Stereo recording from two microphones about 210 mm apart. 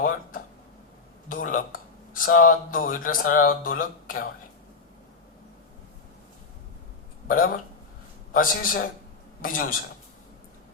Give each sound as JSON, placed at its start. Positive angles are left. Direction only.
{"t": 0.0, "sound": "a sound", "side_deg": 40}
{"t": 1.3, "sound": "speech", "side_deg": 40}
{"t": 7.3, "sound": "speech", "side_deg": 40}